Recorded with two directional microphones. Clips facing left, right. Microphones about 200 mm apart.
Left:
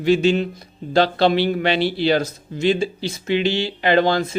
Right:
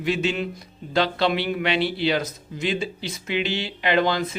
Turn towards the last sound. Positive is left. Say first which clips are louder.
# left 4 dB
turn(degrees=30)  # may be behind; listen again after turning